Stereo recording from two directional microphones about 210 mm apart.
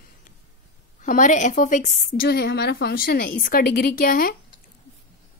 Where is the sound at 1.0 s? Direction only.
35° left (ahead or behind).